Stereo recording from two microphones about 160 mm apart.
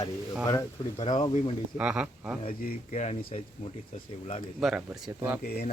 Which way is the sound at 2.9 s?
45° left (ahead or behind).